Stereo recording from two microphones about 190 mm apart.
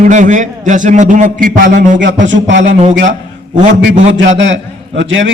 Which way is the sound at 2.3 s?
75° right (ahead or behind).